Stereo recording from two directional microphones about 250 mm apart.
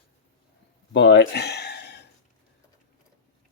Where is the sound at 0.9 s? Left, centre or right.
Left.